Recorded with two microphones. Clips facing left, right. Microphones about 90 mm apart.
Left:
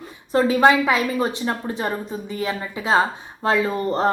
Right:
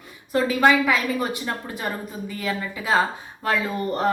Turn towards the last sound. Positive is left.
turn(degrees=30)  # may be behind; listen again after turning